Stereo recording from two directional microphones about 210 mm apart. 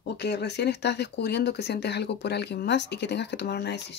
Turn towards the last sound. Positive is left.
turn(degrees=55)  # may be behind; listen again after turning